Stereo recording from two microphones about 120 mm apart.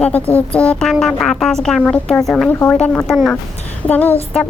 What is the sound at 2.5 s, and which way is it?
Speech, 20° left (ahead or behind).